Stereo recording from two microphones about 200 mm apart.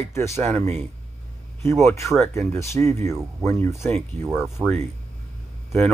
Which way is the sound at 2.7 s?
35° right (ahead or behind).